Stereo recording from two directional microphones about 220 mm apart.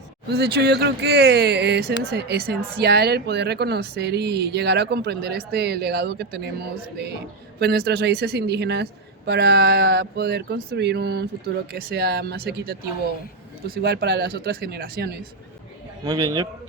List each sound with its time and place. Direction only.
0.3 s speech: 50° right (ahead or behind)
16.0 s a man's voice: 15° right (ahead or behind)